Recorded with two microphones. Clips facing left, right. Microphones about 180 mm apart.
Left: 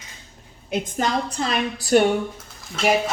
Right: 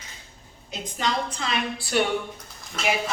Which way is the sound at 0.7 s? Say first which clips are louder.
Left 5 dB; 45° left (ahead or behind).